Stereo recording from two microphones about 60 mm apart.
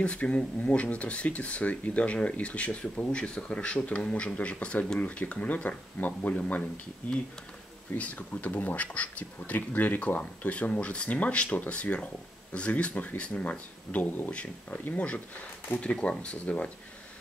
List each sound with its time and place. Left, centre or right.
0.0 s speech: left